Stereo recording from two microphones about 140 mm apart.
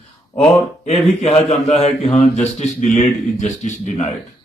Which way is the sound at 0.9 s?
50° left (ahead or behind).